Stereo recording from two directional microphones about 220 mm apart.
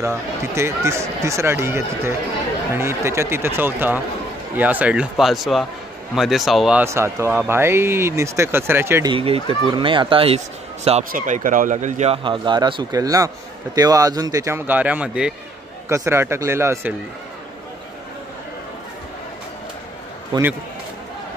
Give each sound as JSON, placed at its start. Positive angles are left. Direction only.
{"t": 0.0, "sound": "speech", "side_deg": -10}
{"t": 9.1, "sound": "speech", "side_deg": -25}
{"t": 20.3, "sound": "speech", "side_deg": -20}